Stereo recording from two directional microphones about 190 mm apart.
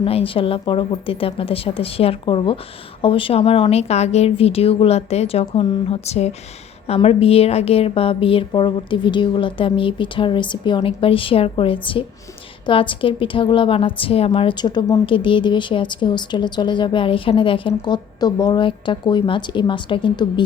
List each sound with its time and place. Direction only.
0.0 s a woman's voice: 30° left (ahead or behind)